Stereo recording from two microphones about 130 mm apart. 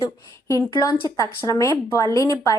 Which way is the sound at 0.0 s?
25° left (ahead or behind).